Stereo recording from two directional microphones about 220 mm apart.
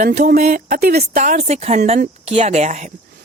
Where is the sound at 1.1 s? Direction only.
35° right (ahead or behind).